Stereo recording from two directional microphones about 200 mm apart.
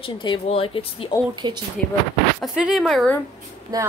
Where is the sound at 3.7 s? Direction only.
20° right (ahead or behind).